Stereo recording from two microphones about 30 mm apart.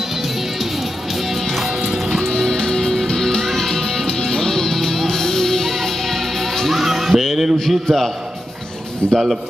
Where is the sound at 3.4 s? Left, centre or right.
Centre.